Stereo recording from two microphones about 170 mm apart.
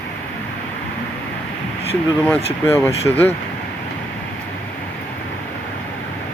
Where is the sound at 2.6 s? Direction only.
15° left (ahead or behind).